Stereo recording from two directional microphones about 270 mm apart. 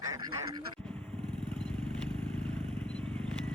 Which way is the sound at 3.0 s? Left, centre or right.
Centre.